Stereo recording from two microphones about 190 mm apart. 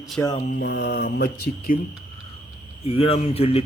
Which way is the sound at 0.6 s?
60° left (ahead or behind).